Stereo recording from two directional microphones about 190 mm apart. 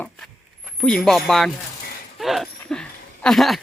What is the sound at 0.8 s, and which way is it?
Speech, 5° left (ahead or behind).